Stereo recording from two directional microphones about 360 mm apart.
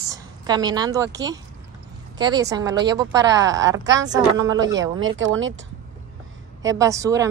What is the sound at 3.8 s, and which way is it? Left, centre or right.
Speech, right.